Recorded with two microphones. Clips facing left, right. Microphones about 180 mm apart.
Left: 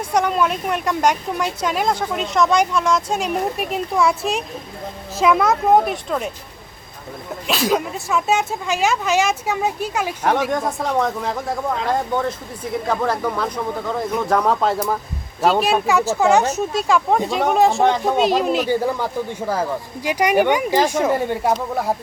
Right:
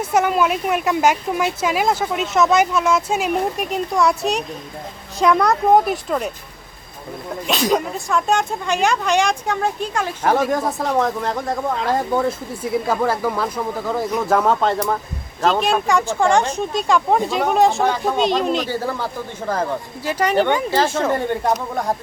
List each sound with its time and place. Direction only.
0.0 s speech: 5° right (ahead or behind)
7.4 s speech: centre (ahead or behind)
10.5 s speech: centre (ahead or behind)
17.8 s speech: 20° left (ahead or behind)
18.2 s speech: 5° left (ahead or behind)